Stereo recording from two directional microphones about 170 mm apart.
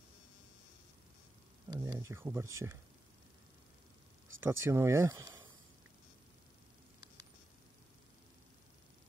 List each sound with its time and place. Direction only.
1.7 s speech: 20° right (ahead or behind)
4.4 s speech: 15° right (ahead or behind)